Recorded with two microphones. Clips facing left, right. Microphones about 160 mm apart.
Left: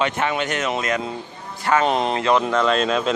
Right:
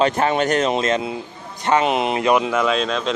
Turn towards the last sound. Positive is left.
turn(degrees=0)  # may be behind; listen again after turning